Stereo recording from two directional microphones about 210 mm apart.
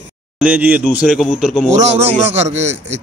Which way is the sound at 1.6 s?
35° right (ahead or behind).